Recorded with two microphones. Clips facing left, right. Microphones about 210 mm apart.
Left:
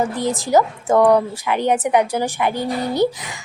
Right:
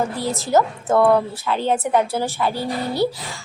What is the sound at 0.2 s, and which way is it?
A woman's voice, 15° left (ahead or behind).